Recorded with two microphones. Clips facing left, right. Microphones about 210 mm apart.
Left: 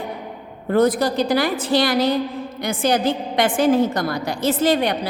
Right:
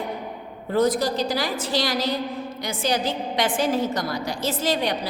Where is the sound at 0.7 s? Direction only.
60° left (ahead or behind).